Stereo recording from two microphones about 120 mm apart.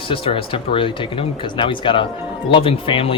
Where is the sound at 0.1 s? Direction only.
50° left (ahead or behind).